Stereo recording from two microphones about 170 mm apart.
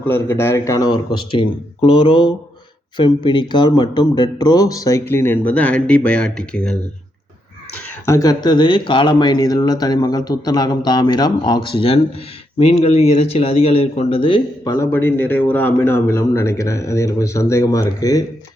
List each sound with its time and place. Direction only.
0.0 s speech: 15° left (ahead or behind)
8.0 s speech: 20° left (ahead or behind)